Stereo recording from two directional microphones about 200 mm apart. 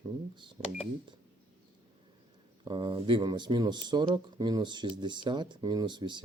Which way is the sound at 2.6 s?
25° right (ahead or behind).